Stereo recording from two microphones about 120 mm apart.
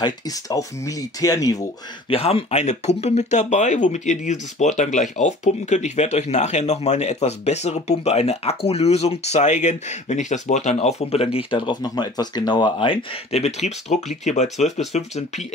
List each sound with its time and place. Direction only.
0.0 s speech: 30° left (ahead or behind)
2.0 s speech: 50° left (ahead or behind)
11.3 s speech: 45° left (ahead or behind); by 15.4 s 70° left (ahead or behind)